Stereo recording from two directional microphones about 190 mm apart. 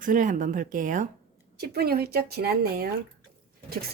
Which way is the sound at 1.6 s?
55° right (ahead or behind).